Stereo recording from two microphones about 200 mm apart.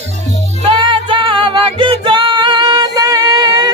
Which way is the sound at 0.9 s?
25° right (ahead or behind).